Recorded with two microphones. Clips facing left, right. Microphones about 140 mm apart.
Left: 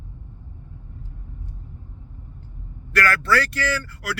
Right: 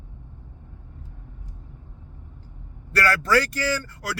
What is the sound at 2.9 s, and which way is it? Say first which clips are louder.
Speech: even; 35° right (ahead or behind).